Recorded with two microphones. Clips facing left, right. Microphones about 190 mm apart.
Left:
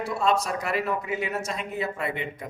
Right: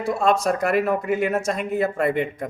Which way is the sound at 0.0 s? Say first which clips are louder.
Right 5 dB; 50° right (ahead or behind).